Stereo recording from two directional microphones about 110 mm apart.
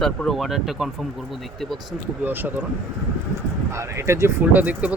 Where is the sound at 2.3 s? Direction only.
15° right (ahead or behind).